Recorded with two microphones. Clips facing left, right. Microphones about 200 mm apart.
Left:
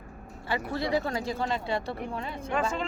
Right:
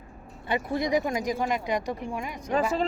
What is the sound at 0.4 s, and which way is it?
Speech, 20° right (ahead or behind).